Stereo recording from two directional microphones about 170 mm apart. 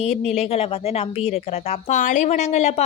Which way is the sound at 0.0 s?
40° left (ahead or behind).